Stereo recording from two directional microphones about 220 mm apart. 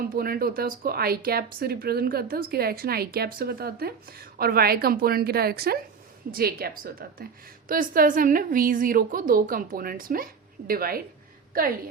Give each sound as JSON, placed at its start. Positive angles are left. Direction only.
{"t": 0.0, "sound": "a woman's voice", "side_deg": -40}